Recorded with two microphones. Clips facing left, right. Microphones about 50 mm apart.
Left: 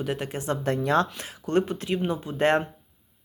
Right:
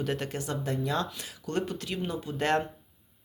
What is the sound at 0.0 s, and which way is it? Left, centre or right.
Speech, centre.